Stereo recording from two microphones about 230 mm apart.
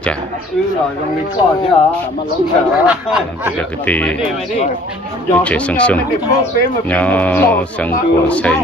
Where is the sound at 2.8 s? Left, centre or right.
Centre.